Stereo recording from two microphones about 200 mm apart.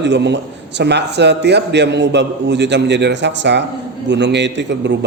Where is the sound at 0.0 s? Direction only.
60° right (ahead or behind).